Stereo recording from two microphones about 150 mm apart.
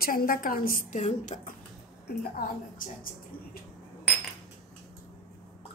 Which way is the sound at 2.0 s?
70° left (ahead or behind).